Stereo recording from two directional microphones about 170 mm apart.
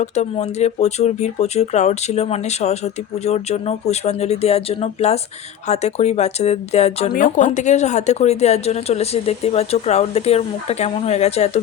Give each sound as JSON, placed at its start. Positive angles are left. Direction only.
{"t": 0.0, "sound": "speech", "side_deg": 40}
{"t": 7.1, "sound": "speech", "side_deg": 50}